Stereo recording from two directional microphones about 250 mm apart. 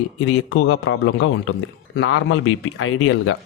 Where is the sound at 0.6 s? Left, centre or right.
Left.